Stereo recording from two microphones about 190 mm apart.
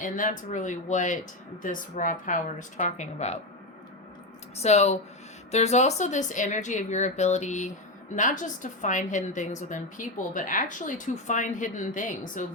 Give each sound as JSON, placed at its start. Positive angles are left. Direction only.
{"t": 0.0, "sound": "a woman's voice", "side_deg": 40}
{"t": 4.6, "sound": "a woman's voice", "side_deg": 35}